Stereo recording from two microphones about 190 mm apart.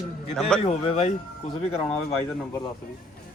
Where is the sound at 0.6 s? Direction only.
35° left (ahead or behind).